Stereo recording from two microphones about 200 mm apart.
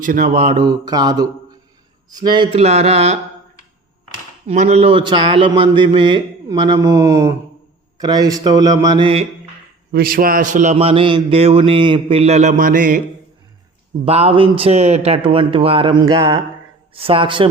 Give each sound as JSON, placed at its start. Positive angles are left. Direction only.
{"t": 0.0, "sound": "speech", "side_deg": -45}
{"t": 0.3, "sound": "a man's voice", "side_deg": -25}
{"t": 4.4, "sound": "a man's voice", "side_deg": -35}
{"t": 9.9, "sound": "a sound", "side_deg": -45}
{"t": 14.0, "sound": "a man's voice", "side_deg": -30}
{"t": 16.9, "sound": "a man's voice", "side_deg": -25}